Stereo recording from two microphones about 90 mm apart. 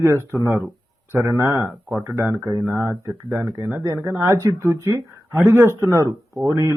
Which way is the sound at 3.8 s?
35° right (ahead or behind).